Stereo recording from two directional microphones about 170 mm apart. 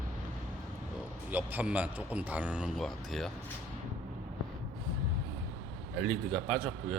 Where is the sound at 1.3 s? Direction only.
10° right (ahead or behind).